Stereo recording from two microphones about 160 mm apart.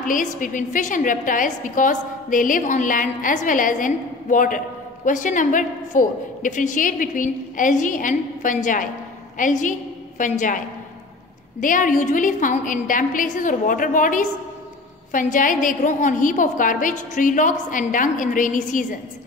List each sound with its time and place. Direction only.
0.0 s a woman's voice: 55° left (ahead or behind)
11.6 s a woman's voice: 55° left (ahead or behind)